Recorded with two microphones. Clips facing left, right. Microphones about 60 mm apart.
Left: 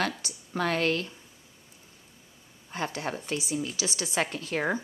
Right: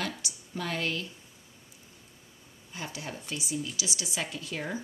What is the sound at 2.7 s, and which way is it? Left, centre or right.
A woman's voice, left.